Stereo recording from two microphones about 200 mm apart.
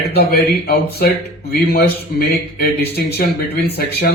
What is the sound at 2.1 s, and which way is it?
Speech, 50° left (ahead or behind).